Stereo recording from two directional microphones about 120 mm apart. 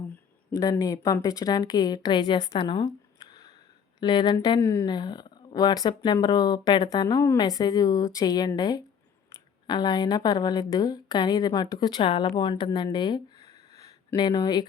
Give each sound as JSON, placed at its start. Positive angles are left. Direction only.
{"t": 0.5, "sound": "a woman's voice", "side_deg": 30}
{"t": 2.6, "sound": "a sound", "side_deg": 40}
{"t": 4.0, "sound": "a woman's voice", "side_deg": 40}
{"t": 4.9, "sound": "a woman's voice", "side_deg": 35}
{"t": 13.5, "sound": "a sound", "side_deg": -65}
{"t": 14.1, "sound": "a woman's voice", "side_deg": 30}